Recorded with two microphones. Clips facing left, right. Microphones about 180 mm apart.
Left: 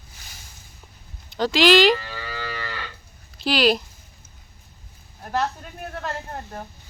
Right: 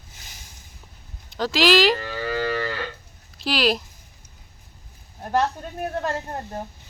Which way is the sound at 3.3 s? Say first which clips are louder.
Left 2 dB; centre (ahead or behind).